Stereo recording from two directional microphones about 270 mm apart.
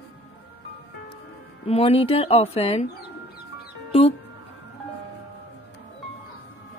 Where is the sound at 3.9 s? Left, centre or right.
Left.